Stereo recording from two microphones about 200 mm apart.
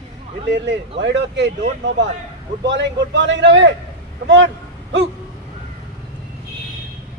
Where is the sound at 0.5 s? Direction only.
65° right (ahead or behind).